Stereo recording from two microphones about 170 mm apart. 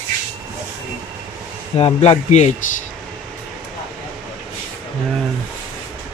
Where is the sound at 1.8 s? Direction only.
35° left (ahead or behind).